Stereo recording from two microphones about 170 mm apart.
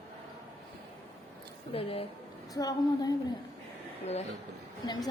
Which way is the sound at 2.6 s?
20° left (ahead or behind).